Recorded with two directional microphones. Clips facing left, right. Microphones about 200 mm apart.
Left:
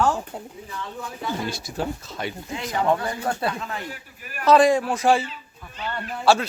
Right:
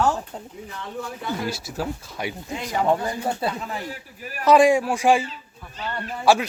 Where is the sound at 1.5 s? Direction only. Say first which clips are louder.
Even; 5° right (ahead or behind).